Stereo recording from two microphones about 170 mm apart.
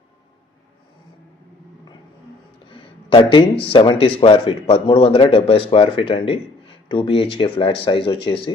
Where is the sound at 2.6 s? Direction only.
30° left (ahead or behind).